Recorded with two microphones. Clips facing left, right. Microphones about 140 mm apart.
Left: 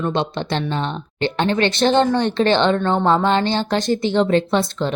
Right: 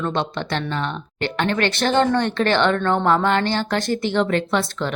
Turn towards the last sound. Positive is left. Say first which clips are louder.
# left 3 dB
turn(degrees=20)  # may be behind; listen again after turning